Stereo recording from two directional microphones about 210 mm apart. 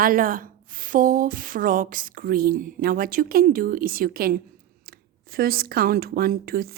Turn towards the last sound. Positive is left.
turn(degrees=-45)  # may be behind; listen again after turning